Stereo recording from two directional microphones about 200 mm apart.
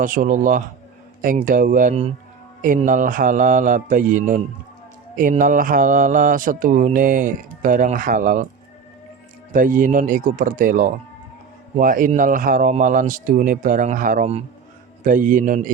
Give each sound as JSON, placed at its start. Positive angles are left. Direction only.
{"t": 0.0, "sound": "speech", "side_deg": -40}
{"t": 1.5, "sound": "mantra", "side_deg": -45}
{"t": 2.6, "sound": "speech", "side_deg": -40}
{"t": 5.1, "sound": "mantra", "side_deg": -40}
{"t": 9.5, "sound": "speech", "side_deg": -40}
{"t": 11.8, "sound": "mantra", "side_deg": -45}
{"t": 15.0, "sound": "speech", "side_deg": -40}